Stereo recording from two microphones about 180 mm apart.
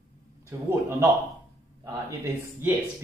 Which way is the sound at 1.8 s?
15° right (ahead or behind).